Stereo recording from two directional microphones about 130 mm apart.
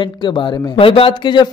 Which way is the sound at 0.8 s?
45° left (ahead or behind).